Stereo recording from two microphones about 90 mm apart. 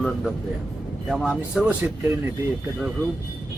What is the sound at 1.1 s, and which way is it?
Speech, 10° right (ahead or behind).